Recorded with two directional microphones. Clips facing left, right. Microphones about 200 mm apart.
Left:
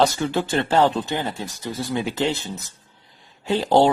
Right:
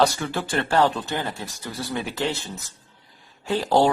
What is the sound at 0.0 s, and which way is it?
Speech, 20° left (ahead or behind).